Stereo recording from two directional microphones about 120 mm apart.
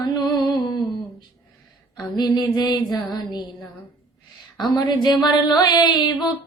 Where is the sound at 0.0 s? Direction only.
35° left (ahead or behind).